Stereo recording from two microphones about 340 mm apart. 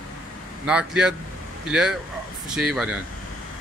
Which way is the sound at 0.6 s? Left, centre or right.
Centre.